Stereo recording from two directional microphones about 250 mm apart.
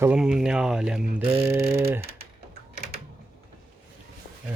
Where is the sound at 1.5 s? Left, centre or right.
Centre.